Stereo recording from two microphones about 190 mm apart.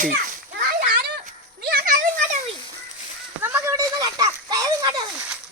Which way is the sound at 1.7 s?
45° right (ahead or behind).